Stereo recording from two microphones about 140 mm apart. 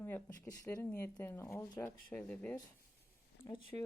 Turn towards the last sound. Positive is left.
turn(degrees=15)  # may be behind; listen again after turning